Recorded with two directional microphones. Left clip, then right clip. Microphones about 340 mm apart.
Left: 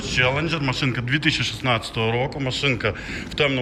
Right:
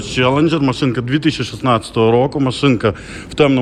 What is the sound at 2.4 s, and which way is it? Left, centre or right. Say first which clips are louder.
Speech: right 10 dB; right.